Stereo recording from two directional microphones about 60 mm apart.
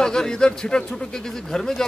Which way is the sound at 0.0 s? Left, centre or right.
Centre.